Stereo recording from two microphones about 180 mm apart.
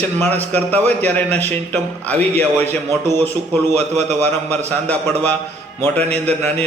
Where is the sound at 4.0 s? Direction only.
40° right (ahead or behind).